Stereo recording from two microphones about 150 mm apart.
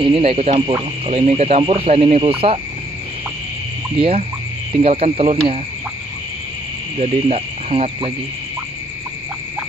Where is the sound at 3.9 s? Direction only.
40° right (ahead or behind).